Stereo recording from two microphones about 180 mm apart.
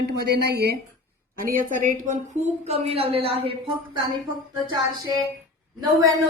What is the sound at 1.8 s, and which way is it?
Speech, 45° right (ahead or behind).